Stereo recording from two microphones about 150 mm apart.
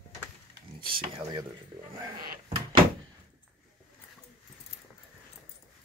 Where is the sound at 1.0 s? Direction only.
35° right (ahead or behind).